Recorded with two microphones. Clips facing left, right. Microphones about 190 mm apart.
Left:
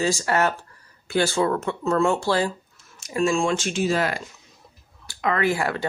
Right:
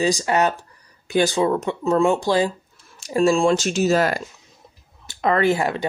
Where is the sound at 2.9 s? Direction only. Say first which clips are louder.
Right 4 dB; 30° right (ahead or behind).